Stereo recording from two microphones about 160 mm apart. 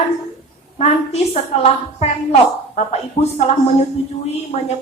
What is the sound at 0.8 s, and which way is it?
A woman's voice, 40° left (ahead or behind).